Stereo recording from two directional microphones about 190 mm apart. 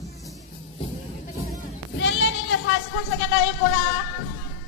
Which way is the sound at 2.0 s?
70° left (ahead or behind).